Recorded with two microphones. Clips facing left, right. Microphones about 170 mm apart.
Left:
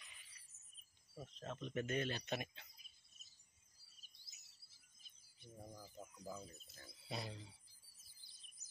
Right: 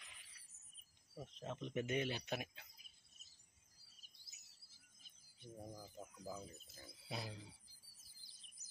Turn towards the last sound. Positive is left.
turn(degrees=-5)  # may be behind; listen again after turning